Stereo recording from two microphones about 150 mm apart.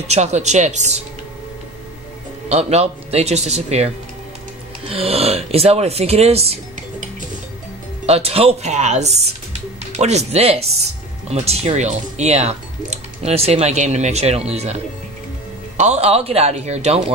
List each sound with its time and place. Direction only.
0.1 s speech: 50° right (ahead or behind)
2.5 s speech: 45° right (ahead or behind)
8.1 s speech: 40° right (ahead or behind)
9.2 s music: 45° right (ahead or behind)
11.2 s speech: 45° right (ahead or behind)
15.8 s speech: 45° right (ahead or behind)